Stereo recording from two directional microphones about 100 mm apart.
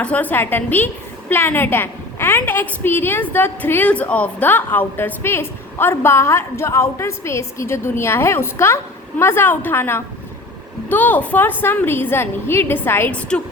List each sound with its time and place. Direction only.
0.0 s a woman's voice: 15° left (ahead or behind)